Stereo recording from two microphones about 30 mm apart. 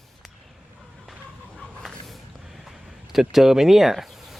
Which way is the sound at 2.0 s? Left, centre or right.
Centre.